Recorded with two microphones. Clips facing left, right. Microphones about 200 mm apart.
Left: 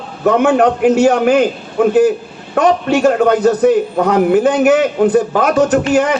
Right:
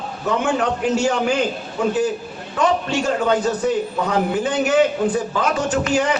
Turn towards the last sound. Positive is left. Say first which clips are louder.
# left 7 dB
turn(degrees=60)  # may be behind; listen again after turning